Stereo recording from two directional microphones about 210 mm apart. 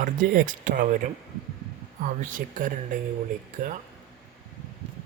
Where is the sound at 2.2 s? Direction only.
40° right (ahead or behind).